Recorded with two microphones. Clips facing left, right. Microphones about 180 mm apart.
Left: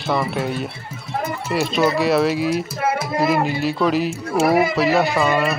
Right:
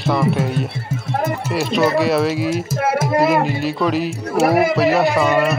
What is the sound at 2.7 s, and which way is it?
Music, 50° right (ahead or behind).